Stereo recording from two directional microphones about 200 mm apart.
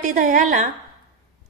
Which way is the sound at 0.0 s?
40° right (ahead or behind).